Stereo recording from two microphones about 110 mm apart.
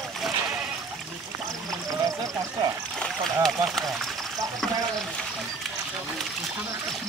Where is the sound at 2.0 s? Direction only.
35° right (ahead or behind).